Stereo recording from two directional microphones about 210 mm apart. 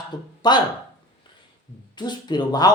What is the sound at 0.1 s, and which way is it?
Speech, 20° left (ahead or behind).